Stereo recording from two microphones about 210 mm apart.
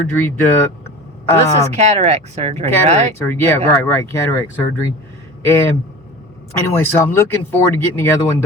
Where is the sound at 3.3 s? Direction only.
10° left (ahead or behind).